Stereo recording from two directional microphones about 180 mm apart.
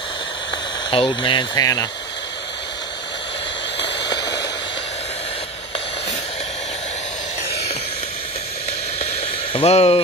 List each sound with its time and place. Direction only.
0.8 s speech: 25° left (ahead or behind)
3.8 s a sound: 25° left (ahead or behind)
9.5 s speech: 35° left (ahead or behind)